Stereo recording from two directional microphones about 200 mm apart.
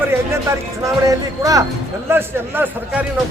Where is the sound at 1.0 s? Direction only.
15° right (ahead or behind).